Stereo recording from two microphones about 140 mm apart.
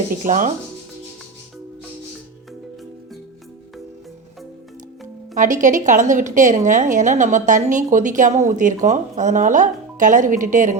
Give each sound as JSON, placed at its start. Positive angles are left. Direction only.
{"t": 0.2, "sound": "a woman's voice", "side_deg": -65}
{"t": 5.3, "sound": "a woman's voice", "side_deg": -65}